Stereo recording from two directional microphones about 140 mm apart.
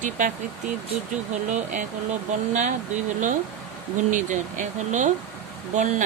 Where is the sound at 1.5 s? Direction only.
60° right (ahead or behind).